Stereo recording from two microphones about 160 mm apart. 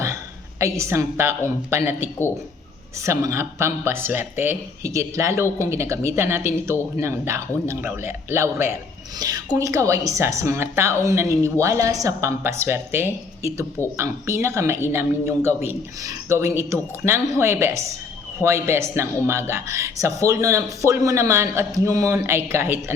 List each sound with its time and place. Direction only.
0.6 s a woman's voice: 20° right (ahead or behind)